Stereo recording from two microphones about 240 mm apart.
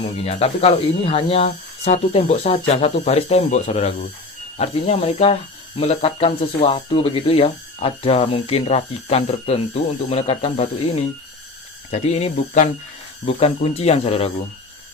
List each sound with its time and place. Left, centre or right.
0.0 s speech: left